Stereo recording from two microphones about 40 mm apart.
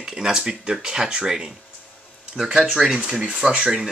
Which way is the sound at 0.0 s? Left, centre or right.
Centre.